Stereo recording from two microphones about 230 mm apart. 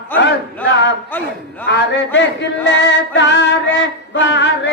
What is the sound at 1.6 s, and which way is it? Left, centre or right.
Speech, left.